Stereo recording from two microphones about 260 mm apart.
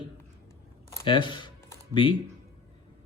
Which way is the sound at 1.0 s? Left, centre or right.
Centre.